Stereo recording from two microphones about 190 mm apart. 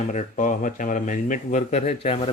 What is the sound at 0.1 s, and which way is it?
Speech, 40° left (ahead or behind).